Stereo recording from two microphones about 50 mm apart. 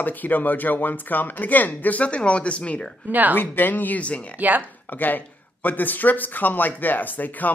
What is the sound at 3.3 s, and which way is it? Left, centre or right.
Speech, left.